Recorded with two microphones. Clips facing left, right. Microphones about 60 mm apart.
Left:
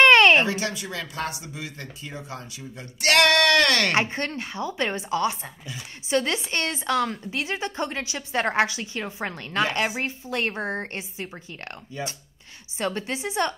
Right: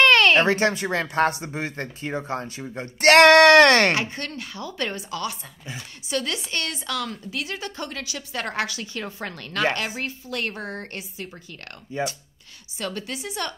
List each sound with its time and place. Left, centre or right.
0.0 s a sound: left
0.4 s speech: right
3.9 s a woman's voice: left
11.9 s speech: right
12.7 s a woman's voice: left